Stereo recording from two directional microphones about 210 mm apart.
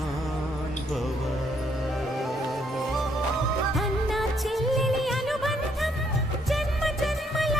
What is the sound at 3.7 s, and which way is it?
Music, centre (ahead or behind).